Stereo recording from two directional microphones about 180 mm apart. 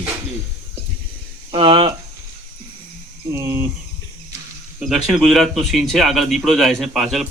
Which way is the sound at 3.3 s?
15° right (ahead or behind).